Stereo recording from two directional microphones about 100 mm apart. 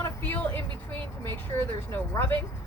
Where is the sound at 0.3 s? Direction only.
20° left (ahead or behind).